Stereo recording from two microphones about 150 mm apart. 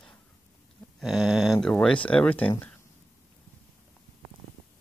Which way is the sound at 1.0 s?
Centre (ahead or behind).